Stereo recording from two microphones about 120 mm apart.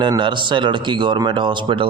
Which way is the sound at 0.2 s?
40° right (ahead or behind).